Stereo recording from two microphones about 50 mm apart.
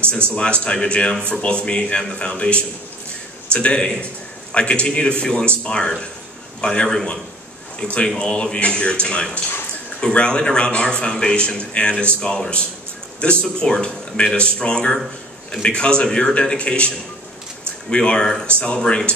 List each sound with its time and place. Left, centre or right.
0.4 s a man's voice: centre